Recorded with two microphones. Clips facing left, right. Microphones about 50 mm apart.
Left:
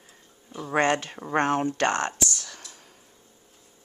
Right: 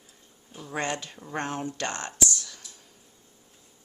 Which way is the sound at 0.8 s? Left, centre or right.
Left.